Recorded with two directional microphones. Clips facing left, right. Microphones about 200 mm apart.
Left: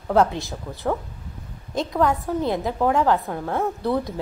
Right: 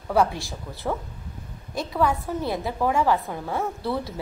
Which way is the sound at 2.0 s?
20° left (ahead or behind).